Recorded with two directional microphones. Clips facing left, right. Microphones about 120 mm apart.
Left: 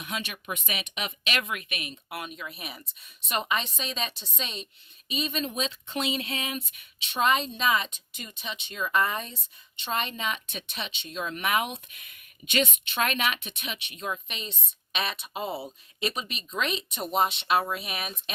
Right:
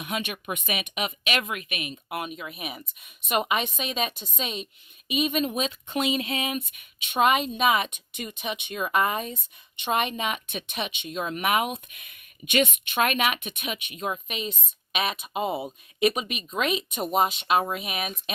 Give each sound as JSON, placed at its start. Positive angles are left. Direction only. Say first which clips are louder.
{"t": 0.0, "sound": "a woman's voice", "louder": "right 4 dB", "side_deg": -15}